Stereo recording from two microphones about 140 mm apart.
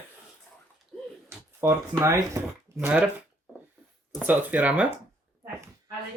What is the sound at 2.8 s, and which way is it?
Speech, 15° right (ahead or behind).